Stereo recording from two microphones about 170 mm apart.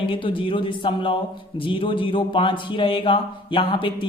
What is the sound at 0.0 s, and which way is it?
Speech, 30° left (ahead or behind).